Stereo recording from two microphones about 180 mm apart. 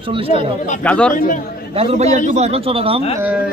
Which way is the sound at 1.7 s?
40° right (ahead or behind).